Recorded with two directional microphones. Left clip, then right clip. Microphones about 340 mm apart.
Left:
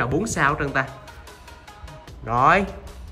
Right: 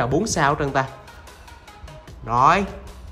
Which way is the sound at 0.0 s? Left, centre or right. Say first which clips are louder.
Right 1 dB; centre.